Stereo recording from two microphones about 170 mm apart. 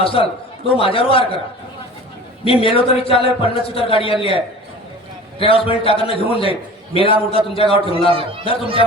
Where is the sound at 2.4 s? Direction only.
30° left (ahead or behind).